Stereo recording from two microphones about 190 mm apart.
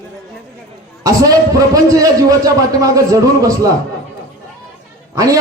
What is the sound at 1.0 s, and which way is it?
A man's voice, 20° right (ahead or behind).